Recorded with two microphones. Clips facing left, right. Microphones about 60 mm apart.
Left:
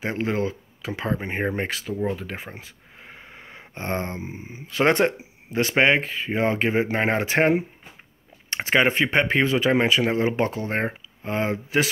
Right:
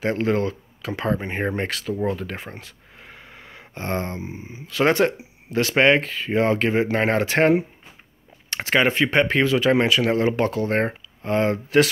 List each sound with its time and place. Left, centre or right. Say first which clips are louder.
0.0 s speech: right 3 dB; centre